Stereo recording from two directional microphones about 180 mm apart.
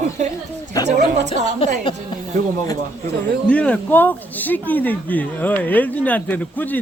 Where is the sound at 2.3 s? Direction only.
40° right (ahead or behind).